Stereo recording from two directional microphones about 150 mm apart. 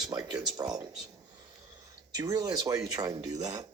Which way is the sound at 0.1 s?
25° right (ahead or behind).